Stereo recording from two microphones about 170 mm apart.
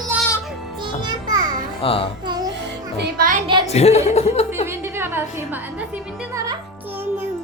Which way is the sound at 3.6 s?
40° left (ahead or behind).